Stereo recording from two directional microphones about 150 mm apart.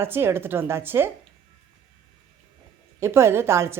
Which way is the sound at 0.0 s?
15° right (ahead or behind).